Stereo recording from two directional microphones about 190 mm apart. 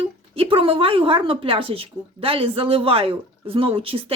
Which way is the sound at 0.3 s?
30° right (ahead or behind).